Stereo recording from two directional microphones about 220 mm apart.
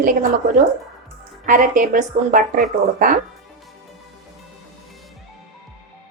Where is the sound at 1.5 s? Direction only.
35° right (ahead or behind).